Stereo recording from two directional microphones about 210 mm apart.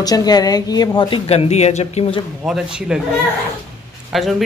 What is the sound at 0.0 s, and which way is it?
A woman's voice, 20° left (ahead or behind).